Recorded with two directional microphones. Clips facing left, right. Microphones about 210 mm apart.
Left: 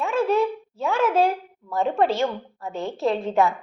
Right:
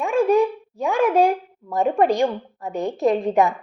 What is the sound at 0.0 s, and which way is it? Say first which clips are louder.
A child's voice: right 4 dB; 15° right (ahead or behind).